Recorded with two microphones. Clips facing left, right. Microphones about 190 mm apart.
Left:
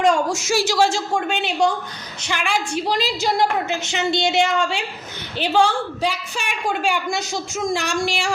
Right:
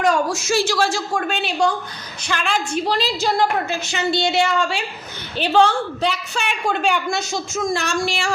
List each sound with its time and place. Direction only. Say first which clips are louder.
0.3 s a woman's voice: left 1 dB; 20° left (ahead or behind)